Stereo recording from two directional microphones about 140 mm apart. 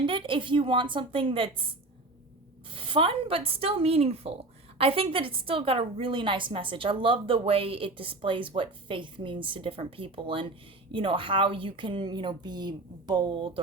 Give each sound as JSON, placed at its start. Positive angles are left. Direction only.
{"t": 0.0, "sound": "a woman's voice", "side_deg": -40}
{"t": 2.6, "sound": "a woman's voice", "side_deg": -40}